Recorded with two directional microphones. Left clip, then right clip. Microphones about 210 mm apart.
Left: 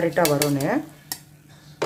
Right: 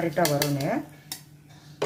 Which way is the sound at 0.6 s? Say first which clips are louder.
Left 4 dB; 40° left (ahead or behind).